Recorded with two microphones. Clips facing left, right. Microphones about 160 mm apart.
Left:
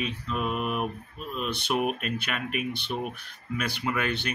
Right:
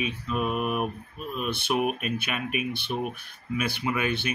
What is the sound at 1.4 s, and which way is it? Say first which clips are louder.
Speech: right 2 dB; 15° left (ahead or behind).